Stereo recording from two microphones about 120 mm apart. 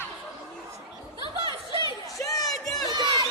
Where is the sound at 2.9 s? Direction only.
35° right (ahead or behind).